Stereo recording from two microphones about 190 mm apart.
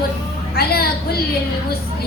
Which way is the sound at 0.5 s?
55° left (ahead or behind).